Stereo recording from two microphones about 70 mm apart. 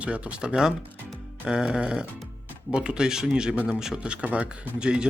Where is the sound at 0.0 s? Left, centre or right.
Centre.